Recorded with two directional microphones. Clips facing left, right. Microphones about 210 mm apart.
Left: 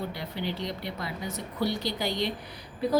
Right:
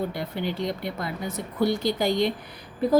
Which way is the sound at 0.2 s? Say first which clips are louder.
Right 4 dB; 50° right (ahead or behind).